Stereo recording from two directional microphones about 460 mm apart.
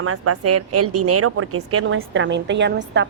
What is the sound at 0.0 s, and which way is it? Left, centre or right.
A woman's voice, right.